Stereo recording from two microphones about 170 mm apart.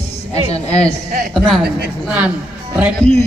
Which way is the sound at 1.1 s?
55° right (ahead or behind).